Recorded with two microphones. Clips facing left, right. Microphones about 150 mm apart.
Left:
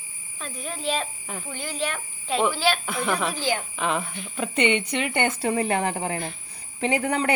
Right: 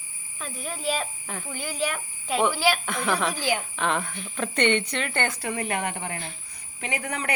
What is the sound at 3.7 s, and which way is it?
Speech, 5° left (ahead or behind).